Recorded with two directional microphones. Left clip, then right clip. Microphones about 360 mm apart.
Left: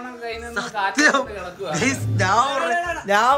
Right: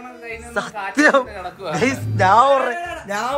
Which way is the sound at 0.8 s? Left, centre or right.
Centre.